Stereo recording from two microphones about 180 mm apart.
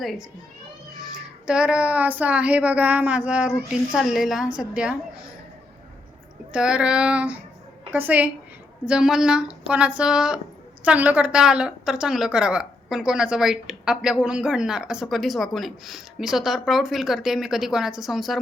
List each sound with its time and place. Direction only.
0.0 s a woman's voice: centre (ahead or behind)
6.5 s a woman's voice: 5° right (ahead or behind)